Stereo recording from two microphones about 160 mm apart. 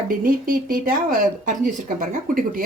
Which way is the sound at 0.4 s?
60° right (ahead or behind).